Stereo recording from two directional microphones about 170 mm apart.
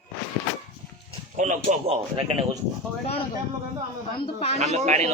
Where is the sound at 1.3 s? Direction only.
50° right (ahead or behind).